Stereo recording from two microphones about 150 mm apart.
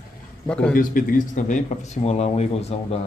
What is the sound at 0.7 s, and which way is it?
Speech, 65° left (ahead or behind).